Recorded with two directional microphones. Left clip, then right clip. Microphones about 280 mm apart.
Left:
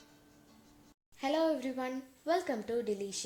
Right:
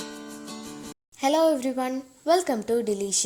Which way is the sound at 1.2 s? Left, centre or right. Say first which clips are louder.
Right 10 dB; right.